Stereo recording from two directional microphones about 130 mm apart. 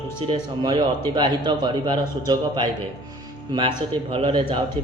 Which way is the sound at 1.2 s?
35° right (ahead or behind).